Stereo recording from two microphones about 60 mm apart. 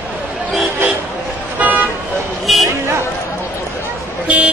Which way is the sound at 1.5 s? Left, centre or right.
Right.